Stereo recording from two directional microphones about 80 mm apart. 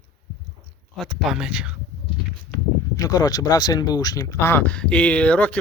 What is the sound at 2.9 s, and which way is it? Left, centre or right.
Speech, left.